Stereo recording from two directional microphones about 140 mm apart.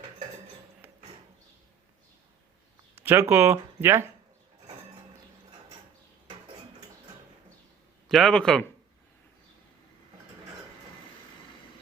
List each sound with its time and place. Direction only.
3.0 s speech: 15° right (ahead or behind)
8.0 s speech: centre (ahead or behind)